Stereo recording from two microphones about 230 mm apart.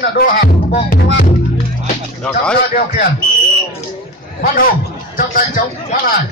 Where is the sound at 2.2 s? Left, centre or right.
Centre.